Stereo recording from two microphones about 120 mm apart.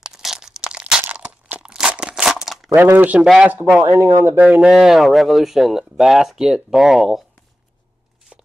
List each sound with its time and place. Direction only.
0.0 s crunch: 5° right (ahead or behind)
2.4 s a sound: centre (ahead or behind)
2.7 s speech: 15° right (ahead or behind)